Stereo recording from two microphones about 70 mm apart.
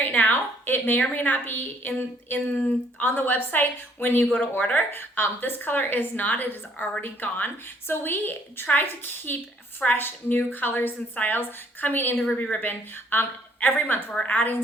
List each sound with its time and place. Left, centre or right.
0.0 s a woman's voice: left
14.1 s a woman's voice: centre